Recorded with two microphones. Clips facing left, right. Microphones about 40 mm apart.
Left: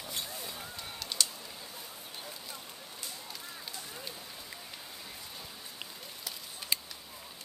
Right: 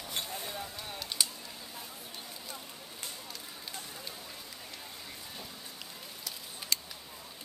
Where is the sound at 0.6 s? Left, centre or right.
Centre.